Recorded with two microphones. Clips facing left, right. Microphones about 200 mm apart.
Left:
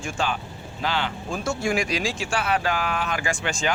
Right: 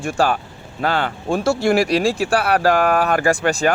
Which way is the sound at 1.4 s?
70° right (ahead or behind).